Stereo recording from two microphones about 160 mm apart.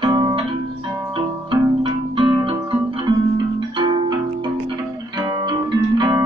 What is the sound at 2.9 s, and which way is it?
Music, 30° right (ahead or behind).